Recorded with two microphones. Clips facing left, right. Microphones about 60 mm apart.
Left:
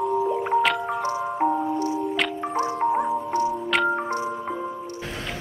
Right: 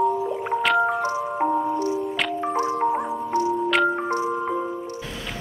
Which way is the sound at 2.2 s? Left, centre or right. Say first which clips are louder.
Right 1 dB; centre.